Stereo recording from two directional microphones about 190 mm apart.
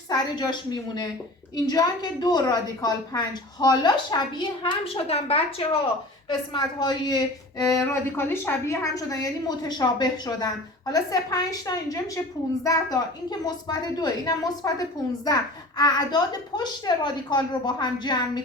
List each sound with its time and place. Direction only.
0.1 s speech: 25° left (ahead or behind)
13.4 s speech: 20° left (ahead or behind)
15.8 s speech: 20° left (ahead or behind)